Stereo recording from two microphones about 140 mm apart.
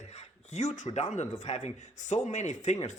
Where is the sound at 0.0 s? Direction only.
50° left (ahead or behind).